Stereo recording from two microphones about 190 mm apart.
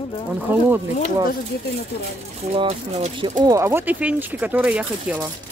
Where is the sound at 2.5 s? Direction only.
30° right (ahead or behind).